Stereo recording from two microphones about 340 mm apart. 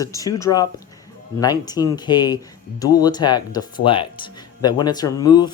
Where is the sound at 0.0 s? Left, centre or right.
Centre.